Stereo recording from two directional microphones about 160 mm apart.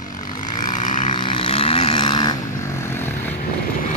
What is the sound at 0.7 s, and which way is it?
Vehicle, 50° left (ahead or behind).